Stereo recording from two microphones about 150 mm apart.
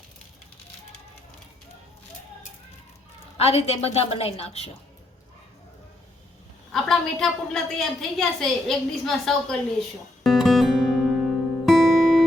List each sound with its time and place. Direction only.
3.3 s a woman's voice: 40° left (ahead or behind)
6.7 s a woman's voice: centre (ahead or behind)
10.2 s guitar: centre (ahead or behind)